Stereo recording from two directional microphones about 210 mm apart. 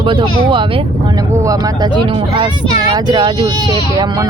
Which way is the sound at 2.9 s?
20° right (ahead or behind).